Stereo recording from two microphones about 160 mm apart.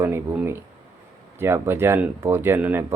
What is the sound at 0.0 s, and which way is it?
Speech, 15° right (ahead or behind).